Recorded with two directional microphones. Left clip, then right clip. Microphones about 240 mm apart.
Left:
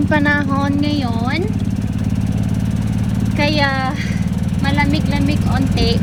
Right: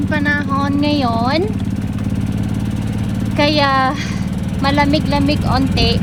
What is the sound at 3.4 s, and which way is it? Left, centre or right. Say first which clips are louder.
Speech: right 4 dB; centre.